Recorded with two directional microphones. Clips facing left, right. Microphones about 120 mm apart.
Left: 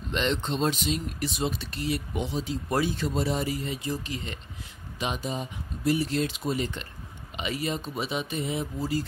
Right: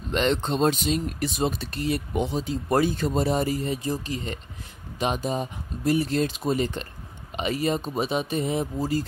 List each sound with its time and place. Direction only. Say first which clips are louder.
0.1 s speech: right 4 dB; 45° right (ahead or behind)